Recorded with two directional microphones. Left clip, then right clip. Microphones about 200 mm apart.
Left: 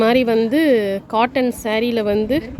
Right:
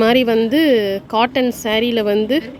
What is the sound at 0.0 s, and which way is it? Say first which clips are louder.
Speech: right 1 dB; centre (ahead or behind).